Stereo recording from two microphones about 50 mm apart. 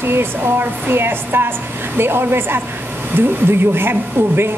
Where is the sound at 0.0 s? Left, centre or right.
Right.